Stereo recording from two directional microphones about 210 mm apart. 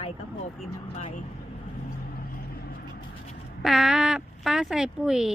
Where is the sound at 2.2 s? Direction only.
45° left (ahead or behind).